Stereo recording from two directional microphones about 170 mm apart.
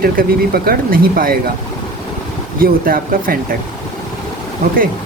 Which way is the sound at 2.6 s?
60° right (ahead or behind).